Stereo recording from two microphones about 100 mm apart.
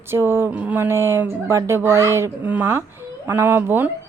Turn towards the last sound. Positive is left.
turn(degrees=-20)  # may be behind; listen again after turning